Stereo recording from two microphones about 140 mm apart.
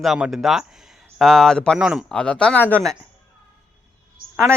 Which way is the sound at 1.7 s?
5° right (ahead or behind).